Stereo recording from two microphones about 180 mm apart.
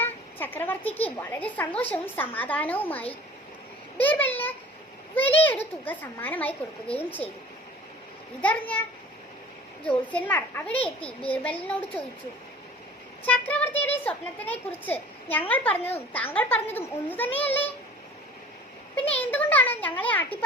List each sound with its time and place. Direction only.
0.0 s a woman's voice: 10° left (ahead or behind)
8.4 s a woman's voice: 10° left (ahead or behind)
9.8 s a woman's voice: 10° left (ahead or behind)
13.2 s a woman's voice: 10° left (ahead or behind)
15.8 s speech: 35° left (ahead or behind)
16.3 s a woman's voice: 10° left (ahead or behind)
19.1 s a woman's voice: 10° left (ahead or behind)